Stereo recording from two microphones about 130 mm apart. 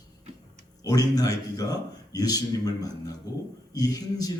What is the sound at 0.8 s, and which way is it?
Speech, 30° left (ahead or behind).